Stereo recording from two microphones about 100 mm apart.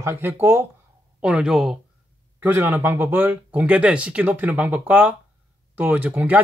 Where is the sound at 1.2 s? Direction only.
10° right (ahead or behind).